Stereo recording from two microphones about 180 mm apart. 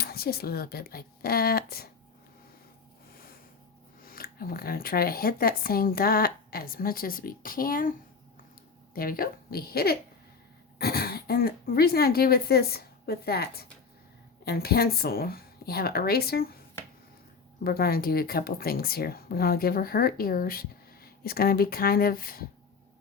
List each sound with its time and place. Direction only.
0.0 s speech: 60° left (ahead or behind)
4.0 s speech: 55° left (ahead or behind)
9.0 s speech: 55° left (ahead or behind)
17.6 s speech: 55° left (ahead or behind)